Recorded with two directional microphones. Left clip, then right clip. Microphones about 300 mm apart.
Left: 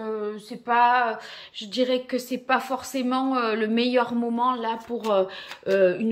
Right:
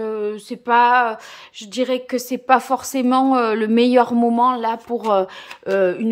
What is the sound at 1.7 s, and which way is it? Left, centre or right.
A woman's voice, centre.